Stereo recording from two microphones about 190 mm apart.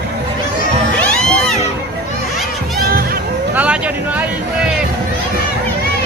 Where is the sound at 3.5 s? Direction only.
5° right (ahead or behind).